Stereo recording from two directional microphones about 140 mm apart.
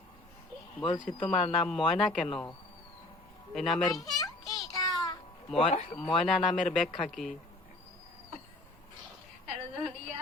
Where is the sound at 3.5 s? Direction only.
Centre (ahead or behind).